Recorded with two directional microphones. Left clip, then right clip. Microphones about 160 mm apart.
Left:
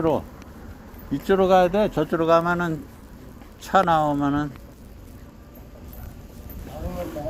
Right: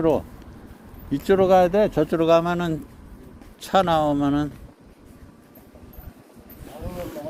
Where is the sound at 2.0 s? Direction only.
90° right.